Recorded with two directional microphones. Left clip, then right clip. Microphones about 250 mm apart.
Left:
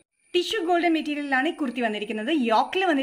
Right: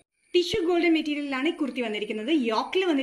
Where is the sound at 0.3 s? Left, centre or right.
Left.